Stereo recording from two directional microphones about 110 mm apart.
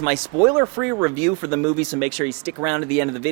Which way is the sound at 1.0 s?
20° right (ahead or behind).